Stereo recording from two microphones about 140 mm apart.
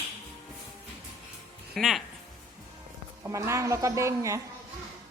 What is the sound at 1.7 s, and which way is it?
Speech, centre (ahead or behind).